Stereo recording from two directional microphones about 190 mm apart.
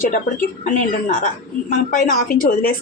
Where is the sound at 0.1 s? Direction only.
45° left (ahead or behind).